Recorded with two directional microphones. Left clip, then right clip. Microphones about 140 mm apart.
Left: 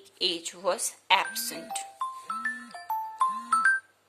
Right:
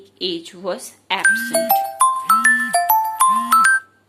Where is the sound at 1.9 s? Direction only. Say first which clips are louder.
Right 19 dB; 90° right.